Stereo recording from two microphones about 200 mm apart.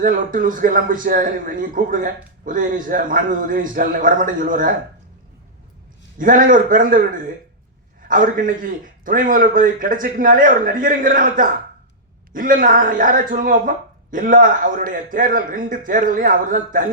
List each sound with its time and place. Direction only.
0.0 s a man's voice: 40° right (ahead or behind)
6.1 s speech: 45° right (ahead or behind)
8.0 s speech: 40° right (ahead or behind)